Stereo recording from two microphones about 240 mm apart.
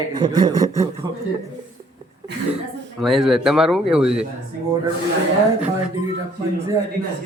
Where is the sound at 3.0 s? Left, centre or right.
Centre.